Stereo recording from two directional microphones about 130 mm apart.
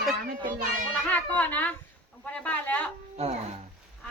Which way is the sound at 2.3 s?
10° left (ahead or behind).